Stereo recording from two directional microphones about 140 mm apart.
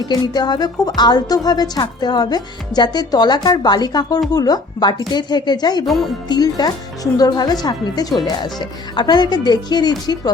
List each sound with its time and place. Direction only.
0.1 s a woman's voice: 30° left (ahead or behind)
5.8 s speech: centre (ahead or behind)
6.2 s a woman's voice: 30° left (ahead or behind)